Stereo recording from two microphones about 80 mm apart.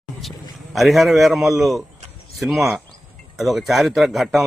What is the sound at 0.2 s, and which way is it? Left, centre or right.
A man's voice, centre.